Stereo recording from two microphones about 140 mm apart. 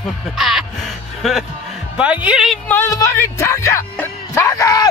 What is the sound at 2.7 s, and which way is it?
Speech, 20° left (ahead or behind).